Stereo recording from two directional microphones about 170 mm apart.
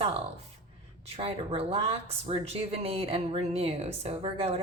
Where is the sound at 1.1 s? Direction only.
35° right (ahead or behind).